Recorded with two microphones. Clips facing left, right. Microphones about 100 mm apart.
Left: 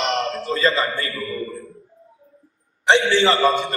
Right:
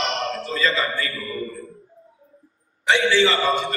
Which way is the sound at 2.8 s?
30° left (ahead or behind).